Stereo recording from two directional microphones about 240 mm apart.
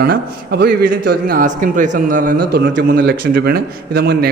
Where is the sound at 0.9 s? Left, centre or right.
Right.